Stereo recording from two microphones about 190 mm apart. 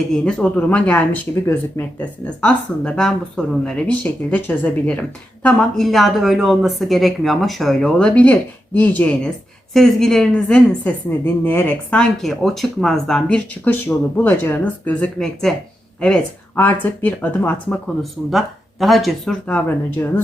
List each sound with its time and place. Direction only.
0.1 s speech: 5° left (ahead or behind)